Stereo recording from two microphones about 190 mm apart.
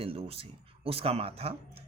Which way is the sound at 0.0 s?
30° right (ahead or behind).